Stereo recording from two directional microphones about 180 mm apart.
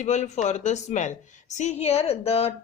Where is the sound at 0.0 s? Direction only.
40° left (ahead or behind).